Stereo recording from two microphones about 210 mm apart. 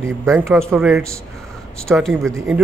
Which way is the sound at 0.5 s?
Centre (ahead or behind).